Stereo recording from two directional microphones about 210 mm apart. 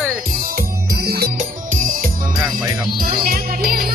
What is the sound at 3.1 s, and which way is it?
Music, 45° right (ahead or behind).